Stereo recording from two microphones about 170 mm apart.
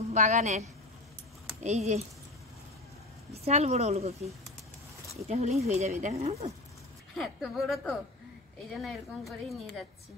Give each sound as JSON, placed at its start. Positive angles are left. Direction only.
{"t": 0.1, "sound": "a woman's voice", "side_deg": -45}
{"t": 3.4, "sound": "speech", "side_deg": -40}
{"t": 5.3, "sound": "speech", "side_deg": -40}
{"t": 7.2, "sound": "a woman's voice", "side_deg": 0}